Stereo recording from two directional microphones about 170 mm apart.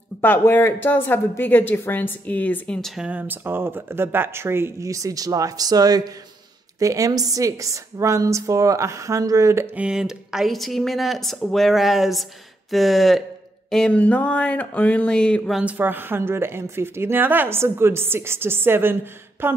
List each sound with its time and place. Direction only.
0.2 s a woman's voice: 10° left (ahead or behind); by 9.8 s 15° right (ahead or behind)
9.8 s speech: 5° right (ahead or behind)
13.7 s a sound: 5° left (ahead or behind)
15.6 s speech: 10° right (ahead or behind)